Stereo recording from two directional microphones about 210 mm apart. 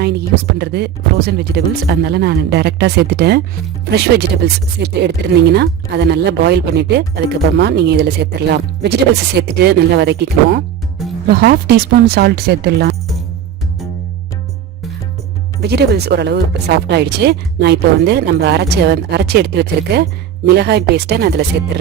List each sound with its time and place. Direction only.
0.6 s speech: 50° right (ahead or behind)
15.6 s speech: 50° right (ahead or behind)